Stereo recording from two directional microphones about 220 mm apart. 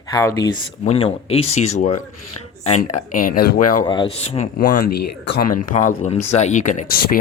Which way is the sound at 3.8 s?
20° left (ahead or behind).